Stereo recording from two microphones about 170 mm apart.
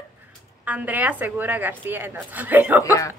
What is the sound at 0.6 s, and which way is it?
A woman's voice, 10° right (ahead or behind).